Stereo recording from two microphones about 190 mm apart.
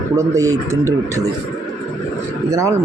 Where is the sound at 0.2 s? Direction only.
15° right (ahead or behind).